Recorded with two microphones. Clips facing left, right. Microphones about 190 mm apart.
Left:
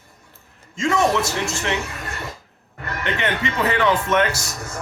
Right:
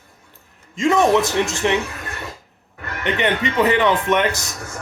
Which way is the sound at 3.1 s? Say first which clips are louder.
Right 5 dB; 20° right (ahead or behind).